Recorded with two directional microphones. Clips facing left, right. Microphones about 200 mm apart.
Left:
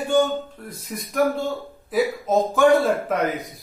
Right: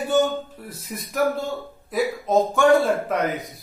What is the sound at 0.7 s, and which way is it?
A man's voice, centre (ahead or behind).